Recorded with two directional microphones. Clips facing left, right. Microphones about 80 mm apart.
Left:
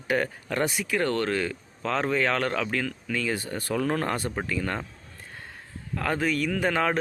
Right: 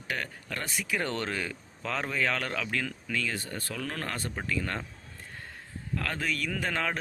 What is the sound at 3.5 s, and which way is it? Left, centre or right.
Speech, left.